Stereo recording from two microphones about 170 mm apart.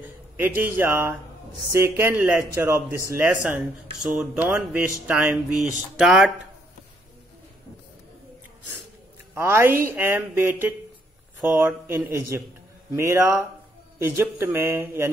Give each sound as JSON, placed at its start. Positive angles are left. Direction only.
{"t": 0.0, "sound": "a man's voice", "side_deg": -10}
{"t": 9.3, "sound": "speech", "side_deg": -15}